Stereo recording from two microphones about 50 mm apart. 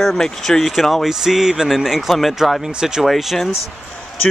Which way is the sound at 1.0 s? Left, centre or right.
Centre.